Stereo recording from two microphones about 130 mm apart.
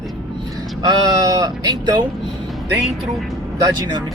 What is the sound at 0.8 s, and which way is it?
Vehicle, 30° right (ahead or behind).